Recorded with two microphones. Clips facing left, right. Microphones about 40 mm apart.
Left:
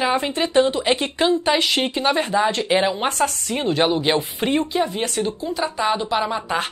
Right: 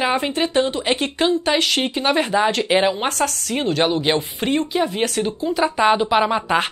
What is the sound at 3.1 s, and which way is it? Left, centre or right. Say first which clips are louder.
Speech: even; centre.